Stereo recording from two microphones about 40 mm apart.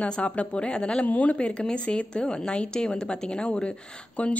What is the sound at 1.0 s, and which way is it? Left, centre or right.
Speech, left.